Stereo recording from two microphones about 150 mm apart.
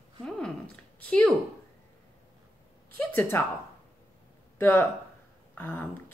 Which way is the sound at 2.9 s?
10° left (ahead or behind).